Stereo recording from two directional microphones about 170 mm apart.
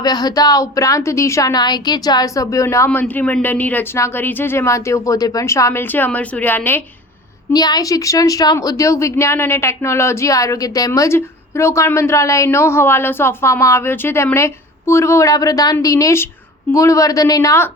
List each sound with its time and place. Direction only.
0.0 s a woman's voice: 25° left (ahead or behind)
7.5 s a woman's voice: 25° left (ahead or behind)